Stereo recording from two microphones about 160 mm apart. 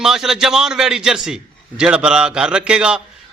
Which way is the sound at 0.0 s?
5° right (ahead or behind).